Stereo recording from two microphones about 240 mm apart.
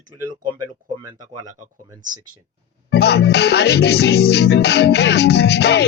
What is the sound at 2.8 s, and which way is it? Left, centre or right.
Music, left.